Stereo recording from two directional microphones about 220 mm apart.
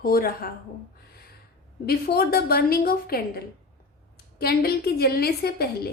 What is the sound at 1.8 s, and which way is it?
A woman's voice, 45° left (ahead or behind).